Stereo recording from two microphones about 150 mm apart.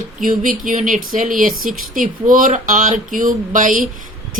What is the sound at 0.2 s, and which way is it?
Speech, 65° right (ahead or behind).